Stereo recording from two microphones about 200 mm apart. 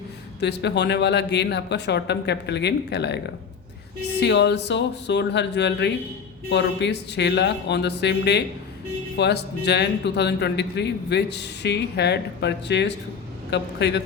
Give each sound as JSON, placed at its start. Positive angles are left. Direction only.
{"t": 0.3, "sound": "speech", "side_deg": 60}
{"t": 4.2, "sound": "speech", "side_deg": 60}